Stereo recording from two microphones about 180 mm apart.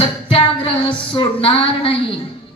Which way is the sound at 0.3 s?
30° left (ahead or behind).